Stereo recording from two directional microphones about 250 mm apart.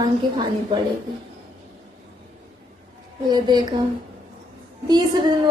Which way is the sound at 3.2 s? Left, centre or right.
Centre.